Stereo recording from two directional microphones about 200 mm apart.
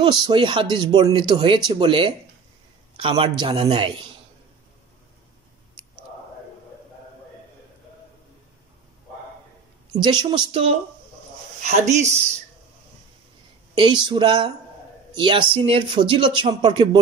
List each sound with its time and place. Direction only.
0.0 s speech: 25° right (ahead or behind)
9.9 s speech: 25° right (ahead or behind)
13.7 s speech: 25° right (ahead or behind)